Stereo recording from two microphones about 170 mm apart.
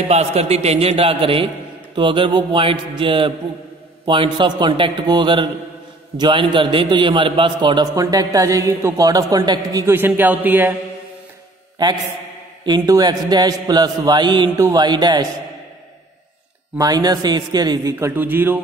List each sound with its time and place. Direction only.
0.1 s a man's voice: 40° right (ahead or behind); by 10.8 s 10° right (ahead or behind)
12.6 s a man's voice: 25° right (ahead or behind)
16.7 s a man's voice: 20° right (ahead or behind)